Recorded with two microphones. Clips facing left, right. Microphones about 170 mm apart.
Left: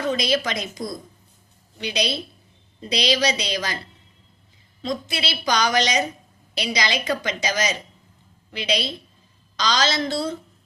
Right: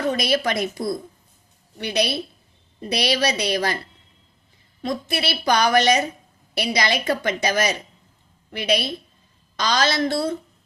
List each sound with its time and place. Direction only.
0.1 s a woman's voice: 55° right (ahead or behind)
1.8 s a woman's voice: 60° right (ahead or behind)
4.8 s a woman's voice: 55° right (ahead or behind)